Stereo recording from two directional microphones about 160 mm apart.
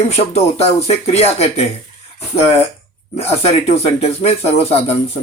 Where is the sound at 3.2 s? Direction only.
40° left (ahead or behind).